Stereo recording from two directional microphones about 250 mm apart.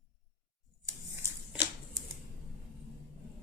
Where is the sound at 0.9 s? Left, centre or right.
Centre.